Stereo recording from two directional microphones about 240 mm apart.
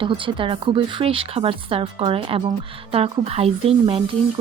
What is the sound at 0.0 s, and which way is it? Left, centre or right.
Speech, right.